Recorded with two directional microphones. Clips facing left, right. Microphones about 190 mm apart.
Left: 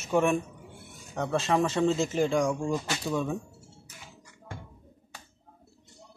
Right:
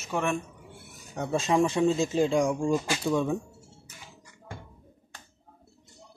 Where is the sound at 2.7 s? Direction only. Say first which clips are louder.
Right 4 dB; 10° right (ahead or behind).